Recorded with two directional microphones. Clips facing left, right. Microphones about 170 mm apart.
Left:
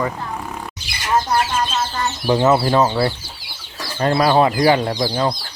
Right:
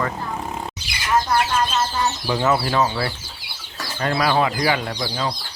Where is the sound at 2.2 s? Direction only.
20° left (ahead or behind).